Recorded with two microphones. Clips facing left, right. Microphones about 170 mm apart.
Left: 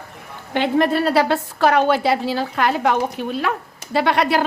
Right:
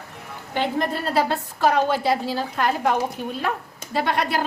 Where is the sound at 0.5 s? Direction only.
70° left (ahead or behind).